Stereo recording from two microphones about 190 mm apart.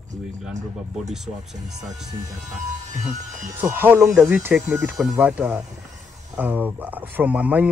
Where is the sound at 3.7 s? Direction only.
10° right (ahead or behind).